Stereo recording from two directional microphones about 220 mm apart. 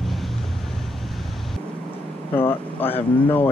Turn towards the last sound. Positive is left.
turn(degrees=10)  # may be behind; listen again after turning